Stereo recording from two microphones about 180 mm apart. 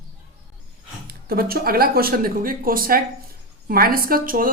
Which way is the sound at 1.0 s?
55° right (ahead or behind).